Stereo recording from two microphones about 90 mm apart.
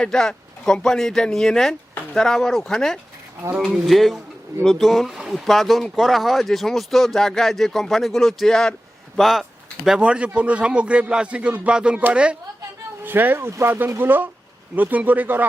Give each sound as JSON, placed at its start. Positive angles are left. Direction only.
{"t": 0.0, "sound": "speech", "side_deg": 5}
{"t": 10.0, "sound": "a man's voice", "side_deg": -15}
{"t": 13.1, "sound": "speech", "side_deg": -20}